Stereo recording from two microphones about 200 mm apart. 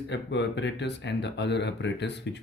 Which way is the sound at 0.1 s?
60° left (ahead or behind).